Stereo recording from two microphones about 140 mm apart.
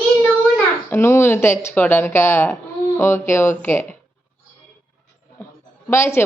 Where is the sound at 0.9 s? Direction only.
15° left (ahead or behind).